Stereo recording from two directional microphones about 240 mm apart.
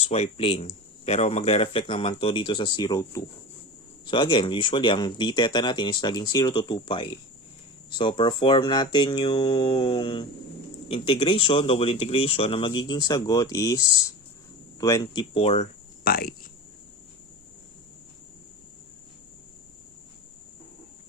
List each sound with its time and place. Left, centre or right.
0.0 s speech: left
16.0 s speech: left